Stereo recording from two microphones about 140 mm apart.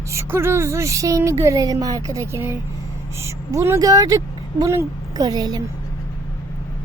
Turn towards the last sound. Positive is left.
turn(degrees=-30)  # may be behind; listen again after turning